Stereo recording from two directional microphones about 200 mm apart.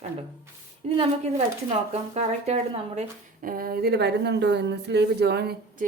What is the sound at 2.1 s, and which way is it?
A woman's voice, 35° right (ahead or behind).